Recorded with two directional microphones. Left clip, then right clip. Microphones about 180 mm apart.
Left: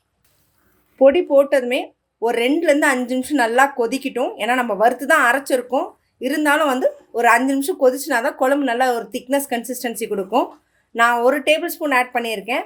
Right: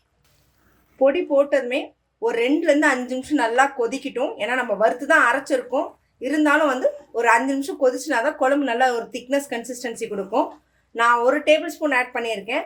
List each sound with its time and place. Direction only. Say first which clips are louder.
0.9 s speech: left 5 dB; 50° left (ahead or behind)